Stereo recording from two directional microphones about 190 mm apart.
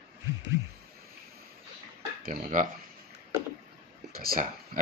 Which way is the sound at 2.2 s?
45° right (ahead or behind).